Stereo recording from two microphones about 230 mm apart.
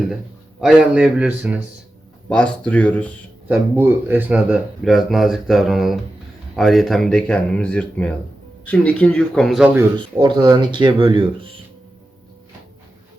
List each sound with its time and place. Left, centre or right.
0.6 s speech: centre
3.5 s speech: centre
9.9 s speech: right